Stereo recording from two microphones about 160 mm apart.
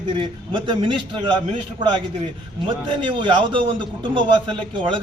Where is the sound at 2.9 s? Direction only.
30° right (ahead or behind).